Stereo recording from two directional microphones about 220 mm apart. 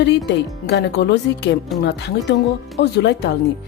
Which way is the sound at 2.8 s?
50° left (ahead or behind).